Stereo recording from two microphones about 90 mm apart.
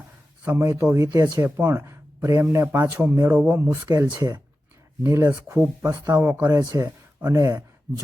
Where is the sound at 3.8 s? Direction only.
35° right (ahead or behind).